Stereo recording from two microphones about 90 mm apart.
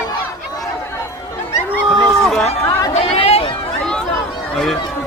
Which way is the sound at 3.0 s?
90° left.